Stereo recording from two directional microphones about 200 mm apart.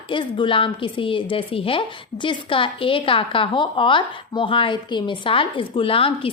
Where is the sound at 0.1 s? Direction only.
25° left (ahead or behind).